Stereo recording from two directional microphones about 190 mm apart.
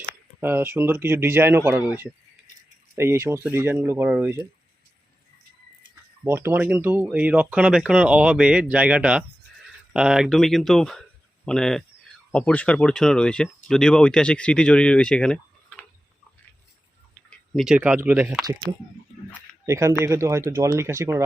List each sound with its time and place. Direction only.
0.3 s speech: 10° right (ahead or behind)
6.2 s speech: 10° right (ahead or behind); by 15.8 s 5° left (ahead or behind)
17.2 s speech: centre (ahead or behind)
19.6 s speech: 15° right (ahead or behind)